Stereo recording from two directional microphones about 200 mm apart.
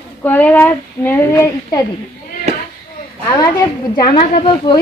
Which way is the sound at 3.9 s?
20° left (ahead or behind).